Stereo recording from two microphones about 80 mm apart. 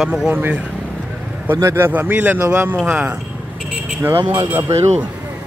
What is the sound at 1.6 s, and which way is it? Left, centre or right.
Speech, right.